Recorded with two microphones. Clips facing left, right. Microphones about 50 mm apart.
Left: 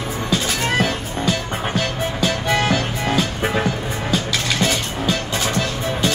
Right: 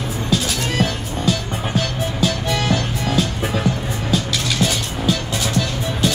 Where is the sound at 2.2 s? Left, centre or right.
Left.